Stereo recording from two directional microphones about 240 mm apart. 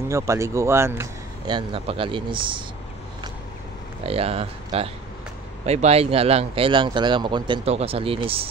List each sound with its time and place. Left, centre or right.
0.1 s speech: centre
1.5 s speech: right
4.0 s speech: right